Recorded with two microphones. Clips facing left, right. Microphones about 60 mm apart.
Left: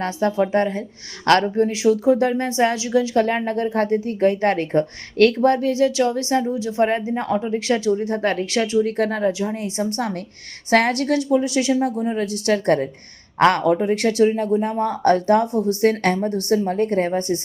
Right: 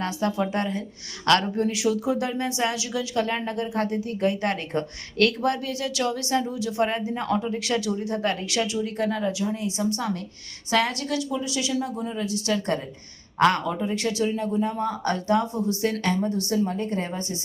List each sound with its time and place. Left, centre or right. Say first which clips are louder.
0.0 s a woman's voice: left 5 dB; left